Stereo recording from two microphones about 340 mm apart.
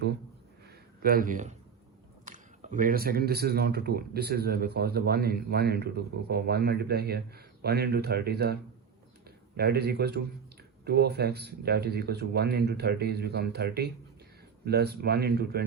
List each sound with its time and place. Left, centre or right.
1.0 s speech: right